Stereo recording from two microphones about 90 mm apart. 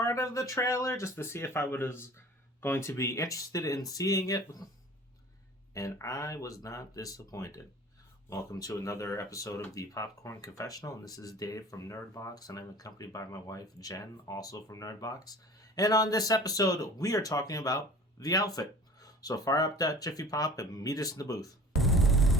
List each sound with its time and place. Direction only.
0.0 s speech: 35° left (ahead or behind)
5.7 s speech: 35° left (ahead or behind)
21.8 s a sound: centre (ahead or behind)